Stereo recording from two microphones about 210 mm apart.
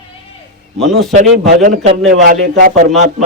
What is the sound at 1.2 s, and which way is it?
A man's voice, 40° right (ahead or behind).